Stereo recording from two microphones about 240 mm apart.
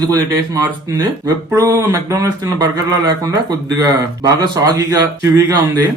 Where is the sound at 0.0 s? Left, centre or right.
Centre.